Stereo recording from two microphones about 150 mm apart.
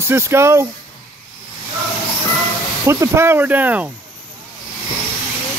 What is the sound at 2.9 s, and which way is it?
Speech, 15° right (ahead or behind).